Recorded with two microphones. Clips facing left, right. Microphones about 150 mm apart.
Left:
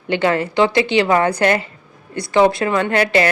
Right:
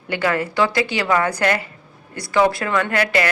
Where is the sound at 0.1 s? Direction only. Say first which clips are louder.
Left 4 dB; 25° left (ahead or behind).